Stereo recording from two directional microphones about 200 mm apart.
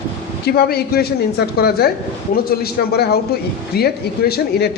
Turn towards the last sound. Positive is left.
turn(degrees=50)  # may be behind; listen again after turning